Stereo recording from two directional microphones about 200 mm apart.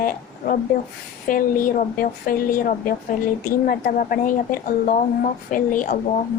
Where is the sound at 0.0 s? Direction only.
45° left (ahead or behind).